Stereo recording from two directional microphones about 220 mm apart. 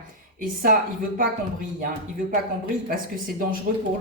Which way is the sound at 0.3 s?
40° right (ahead or behind).